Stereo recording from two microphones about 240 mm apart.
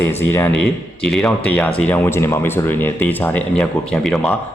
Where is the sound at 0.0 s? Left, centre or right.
Centre.